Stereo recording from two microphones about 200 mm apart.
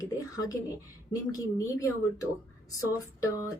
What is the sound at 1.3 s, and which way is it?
Speech, 15° left (ahead or behind).